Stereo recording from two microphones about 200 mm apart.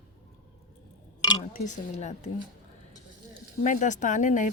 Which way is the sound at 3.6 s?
40° left (ahead or behind).